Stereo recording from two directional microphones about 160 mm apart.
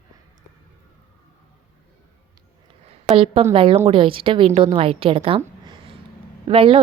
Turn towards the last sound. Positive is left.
turn(degrees=-35)  # may be behind; listen again after turning